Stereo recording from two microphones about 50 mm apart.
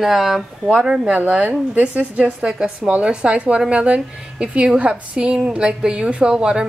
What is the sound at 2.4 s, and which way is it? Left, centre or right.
A woman's voice, centre.